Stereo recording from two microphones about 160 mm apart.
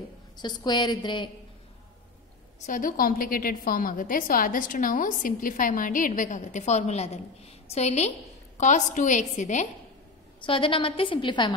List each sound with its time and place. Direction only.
0.4 s a woman's voice: 25° left (ahead or behind)
2.6 s a woman's voice: 60° left (ahead or behind)
10.4 s a woman's voice: 35° left (ahead or behind)